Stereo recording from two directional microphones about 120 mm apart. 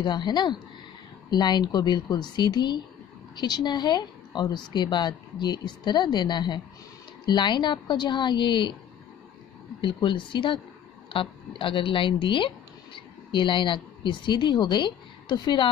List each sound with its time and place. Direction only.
0.0 s a woman's voice: 40° left (ahead or behind)
9.8 s speech: 45° left (ahead or behind)